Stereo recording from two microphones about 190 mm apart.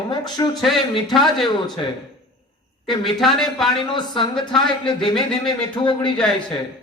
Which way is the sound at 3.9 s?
25° left (ahead or behind).